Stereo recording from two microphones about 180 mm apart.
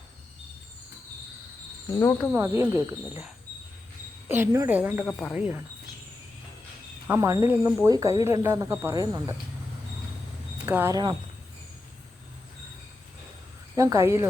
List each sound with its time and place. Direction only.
1.9 s speech: 15° left (ahead or behind)
2.6 s speech: 15° right (ahead or behind)
4.3 s speech: 10° right (ahead or behind)
7.1 s speech: 15° right (ahead or behind)
10.7 s speech: 10° right (ahead or behind)
10.9 s speech: 25° right (ahead or behind)
13.7 s speech: 15° right (ahead or behind)